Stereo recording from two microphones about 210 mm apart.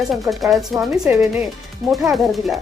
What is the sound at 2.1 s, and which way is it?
Speech, centre (ahead or behind).